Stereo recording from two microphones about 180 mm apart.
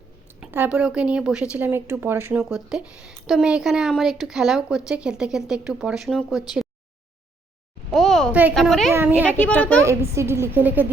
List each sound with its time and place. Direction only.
0.3 s a woman's voice: 10° right (ahead or behind)
2.4 s a woman's voice: centre (ahead or behind)
7.9 s a sound: centre (ahead or behind)
8.5 s a woman's voice: centre (ahead or behind)
8.9 s a woman's voice: 10° right (ahead or behind)
9.6 s a woman's voice: 5° left (ahead or behind)
9.8 s a woman's voice: 15° right (ahead or behind)